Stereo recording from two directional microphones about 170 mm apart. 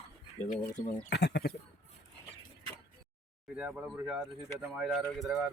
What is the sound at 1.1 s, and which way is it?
Speech, 80° left.